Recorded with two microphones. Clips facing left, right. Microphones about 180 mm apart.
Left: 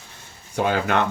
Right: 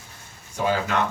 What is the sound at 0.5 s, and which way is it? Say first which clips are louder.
Speech: left 2 dB; 65° left (ahead or behind).